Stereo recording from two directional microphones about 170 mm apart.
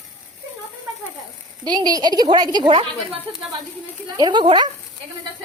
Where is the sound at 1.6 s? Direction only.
25° right (ahead or behind).